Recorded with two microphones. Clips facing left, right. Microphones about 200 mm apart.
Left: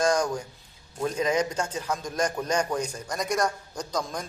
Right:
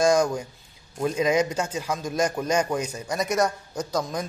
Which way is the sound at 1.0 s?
10° right (ahead or behind).